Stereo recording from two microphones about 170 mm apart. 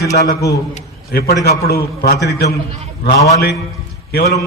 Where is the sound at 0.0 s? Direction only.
20° left (ahead or behind).